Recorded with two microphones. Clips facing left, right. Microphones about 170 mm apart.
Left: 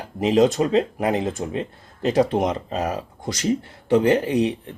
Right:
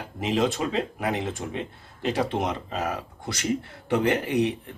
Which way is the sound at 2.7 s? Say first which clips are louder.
Left 4 dB; 30° left (ahead or behind).